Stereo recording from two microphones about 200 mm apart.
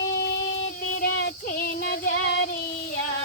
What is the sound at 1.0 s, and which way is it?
Child singing, 55° left (ahead or behind).